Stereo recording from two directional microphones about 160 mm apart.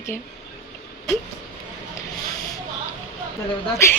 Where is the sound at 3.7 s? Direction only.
15° left (ahead or behind).